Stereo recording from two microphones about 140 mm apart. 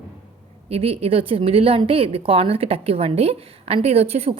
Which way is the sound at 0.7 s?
45° right (ahead or behind).